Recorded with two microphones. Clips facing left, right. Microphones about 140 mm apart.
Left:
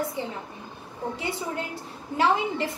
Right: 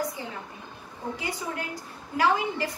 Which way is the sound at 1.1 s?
25° left (ahead or behind).